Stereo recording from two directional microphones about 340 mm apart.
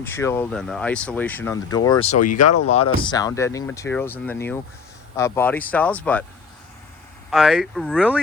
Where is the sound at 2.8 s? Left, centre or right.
Centre.